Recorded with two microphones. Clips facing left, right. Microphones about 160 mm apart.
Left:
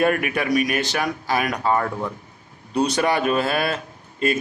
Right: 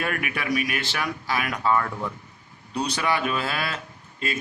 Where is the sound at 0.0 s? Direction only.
45° left (ahead or behind).